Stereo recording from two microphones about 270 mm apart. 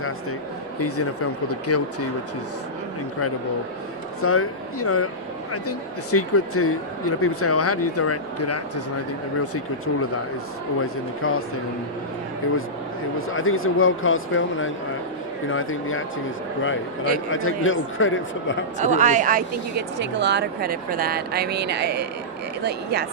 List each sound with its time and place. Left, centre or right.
0.8 s speech: left
4.2 s speech: left
11.2 s speech: left
13.3 s speech: left
17.3 s speech: left
18.8 s speech: right